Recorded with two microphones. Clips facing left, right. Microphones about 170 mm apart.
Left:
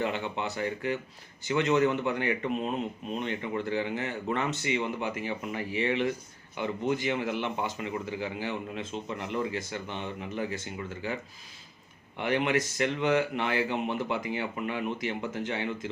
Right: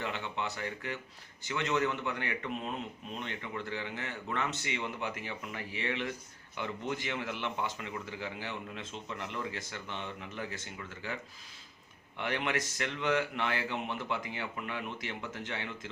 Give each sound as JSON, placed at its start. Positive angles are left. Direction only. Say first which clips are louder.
{"t": 0.0, "sound": "speech", "louder": "left 6 dB", "side_deg": 15}